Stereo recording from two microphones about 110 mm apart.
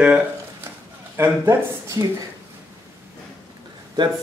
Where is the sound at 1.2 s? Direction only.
25° right (ahead or behind).